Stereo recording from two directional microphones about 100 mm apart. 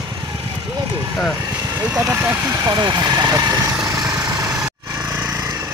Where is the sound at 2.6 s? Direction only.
45° right (ahead or behind).